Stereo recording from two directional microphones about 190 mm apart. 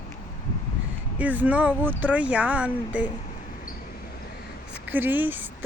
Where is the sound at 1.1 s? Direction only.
10° right (ahead or behind).